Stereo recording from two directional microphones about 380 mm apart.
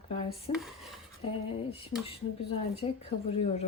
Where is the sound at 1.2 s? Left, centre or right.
Centre.